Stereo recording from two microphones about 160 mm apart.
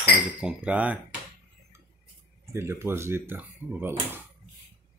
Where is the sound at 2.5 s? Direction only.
15° right (ahead or behind).